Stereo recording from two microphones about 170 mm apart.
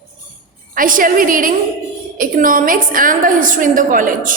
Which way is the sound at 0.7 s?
55° right (ahead or behind).